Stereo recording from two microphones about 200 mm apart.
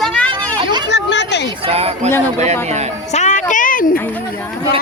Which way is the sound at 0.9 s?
60° left (ahead or behind).